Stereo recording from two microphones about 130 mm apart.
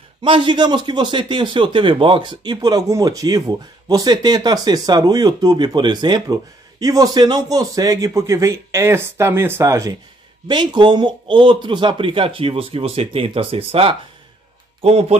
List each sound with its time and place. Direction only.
0.2 s a man's voice: 40° right (ahead or behind); by 9.9 s 25° right (ahead or behind)
10.5 s speech: 35° right (ahead or behind); by 15.1 s 55° right (ahead or behind)